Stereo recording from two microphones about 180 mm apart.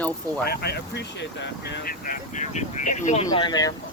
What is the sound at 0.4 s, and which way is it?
Speech, 60° left (ahead or behind).